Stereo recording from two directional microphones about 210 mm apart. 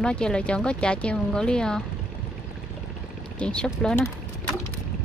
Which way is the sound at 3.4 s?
5° left (ahead or behind).